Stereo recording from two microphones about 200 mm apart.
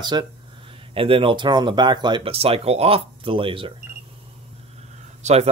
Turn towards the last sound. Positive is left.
turn(degrees=-35)  # may be behind; listen again after turning